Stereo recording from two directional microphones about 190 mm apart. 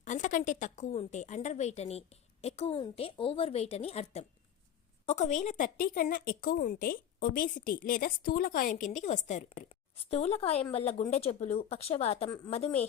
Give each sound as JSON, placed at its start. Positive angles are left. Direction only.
{"t": 0.0, "sound": "a woman's voice", "side_deg": 40}